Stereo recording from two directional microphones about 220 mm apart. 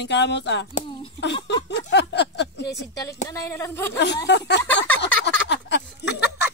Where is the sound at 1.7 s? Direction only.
50° left (ahead or behind).